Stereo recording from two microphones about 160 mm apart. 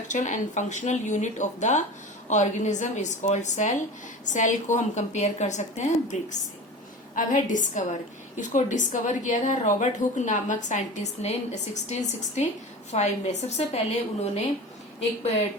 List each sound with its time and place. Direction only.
0.1 s a woman's voice: 50° left (ahead or behind)
7.2 s a woman's voice: 55° left (ahead or behind)